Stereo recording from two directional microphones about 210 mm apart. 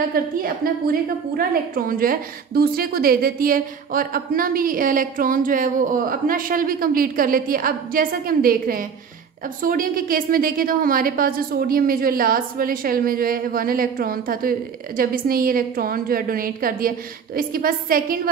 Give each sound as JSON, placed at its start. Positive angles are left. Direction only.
{"t": 0.2, "sound": "a woman's voice", "side_deg": -45}